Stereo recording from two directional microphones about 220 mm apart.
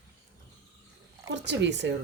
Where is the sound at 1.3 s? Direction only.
50° right (ahead or behind).